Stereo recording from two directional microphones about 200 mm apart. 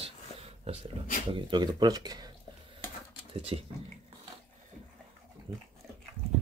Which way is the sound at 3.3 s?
25° right (ahead or behind).